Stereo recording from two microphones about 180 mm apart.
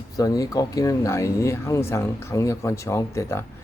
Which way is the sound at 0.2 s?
20° left (ahead or behind).